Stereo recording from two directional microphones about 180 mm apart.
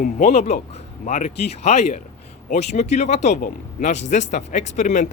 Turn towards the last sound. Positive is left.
turn(degrees=40)  # may be behind; listen again after turning